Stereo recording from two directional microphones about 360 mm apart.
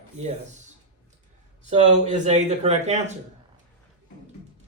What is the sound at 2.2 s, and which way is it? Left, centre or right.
Speech, centre.